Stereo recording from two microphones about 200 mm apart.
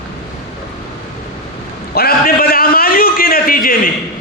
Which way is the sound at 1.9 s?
50° left (ahead or behind).